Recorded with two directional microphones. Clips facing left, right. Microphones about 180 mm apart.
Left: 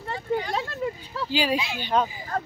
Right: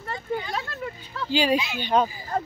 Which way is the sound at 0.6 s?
25° left (ahead or behind).